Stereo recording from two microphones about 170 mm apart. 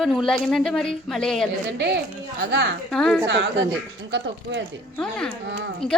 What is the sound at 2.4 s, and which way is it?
Speech, 90° right.